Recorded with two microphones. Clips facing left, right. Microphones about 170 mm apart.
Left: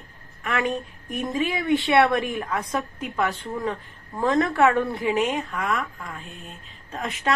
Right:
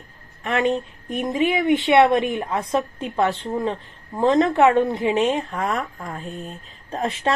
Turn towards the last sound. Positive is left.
turn(degrees=-35)  # may be behind; listen again after turning